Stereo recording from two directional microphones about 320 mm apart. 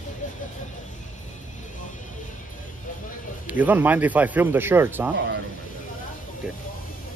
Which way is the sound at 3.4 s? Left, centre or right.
Centre.